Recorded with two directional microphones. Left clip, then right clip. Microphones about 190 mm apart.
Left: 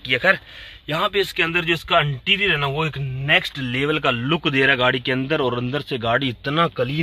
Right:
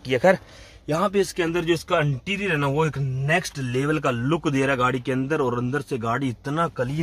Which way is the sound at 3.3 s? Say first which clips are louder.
Left 5 dB; 15° left (ahead or behind).